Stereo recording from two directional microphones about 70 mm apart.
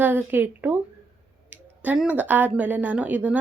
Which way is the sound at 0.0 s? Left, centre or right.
Right.